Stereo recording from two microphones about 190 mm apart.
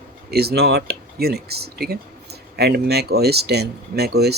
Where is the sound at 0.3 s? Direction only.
55° right (ahead or behind).